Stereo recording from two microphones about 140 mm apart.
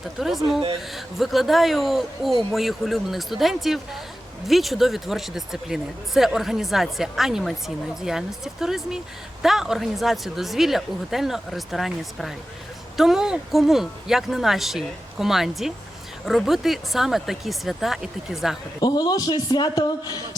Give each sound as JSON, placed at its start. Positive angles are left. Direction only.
{"t": 0.2, "sound": "speech", "side_deg": 0}
{"t": 18.8, "sound": "a man's voice", "side_deg": 30}